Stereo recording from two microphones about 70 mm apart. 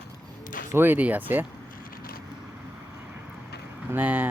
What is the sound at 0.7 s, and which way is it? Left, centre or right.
Speech, right.